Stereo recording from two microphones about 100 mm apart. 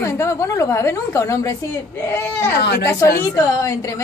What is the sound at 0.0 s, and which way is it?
A woman's voice, 30° left (ahead or behind).